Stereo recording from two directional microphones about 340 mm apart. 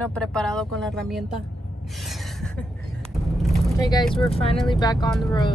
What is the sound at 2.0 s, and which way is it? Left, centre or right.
Gasp, centre.